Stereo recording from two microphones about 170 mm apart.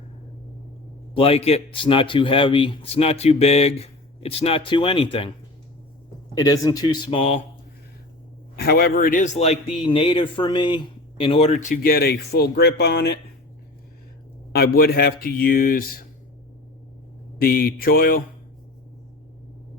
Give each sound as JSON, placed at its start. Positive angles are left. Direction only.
{"t": 1.1, "sound": "a man's voice", "side_deg": 35}
{"t": 6.3, "sound": "speech", "side_deg": 20}
{"t": 8.5, "sound": "speech", "side_deg": 65}
{"t": 9.7, "sound": "a man's voice", "side_deg": 30}
{"t": 11.7, "sound": "speech", "side_deg": 60}
{"t": 14.5, "sound": "speech", "side_deg": 65}
{"t": 17.3, "sound": "speech", "side_deg": 60}